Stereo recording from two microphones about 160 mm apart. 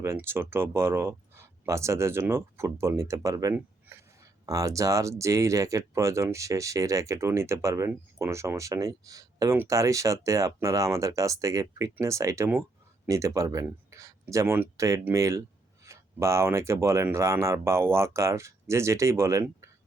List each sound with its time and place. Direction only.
0.0 s speech: 15° right (ahead or behind)